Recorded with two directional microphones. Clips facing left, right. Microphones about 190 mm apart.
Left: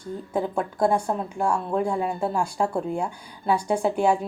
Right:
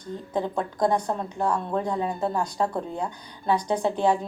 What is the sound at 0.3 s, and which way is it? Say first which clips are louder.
Speech: left 1 dB; 10° left (ahead or behind).